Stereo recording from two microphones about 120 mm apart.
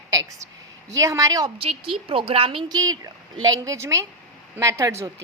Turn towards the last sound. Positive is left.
turn(degrees=-25)  # may be behind; listen again after turning